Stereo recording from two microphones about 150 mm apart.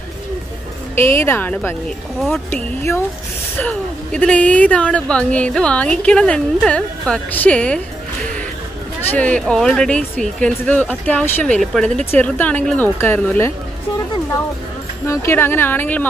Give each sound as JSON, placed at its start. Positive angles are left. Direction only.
{"t": 0.9, "sound": "speech", "side_deg": 15}
{"t": 2.1, "sound": "speech", "side_deg": 0}
{"t": 2.5, "sound": "speech", "side_deg": 15}
{"t": 9.1, "sound": "speech", "side_deg": 10}
{"t": 15.0, "sound": "speech", "side_deg": 15}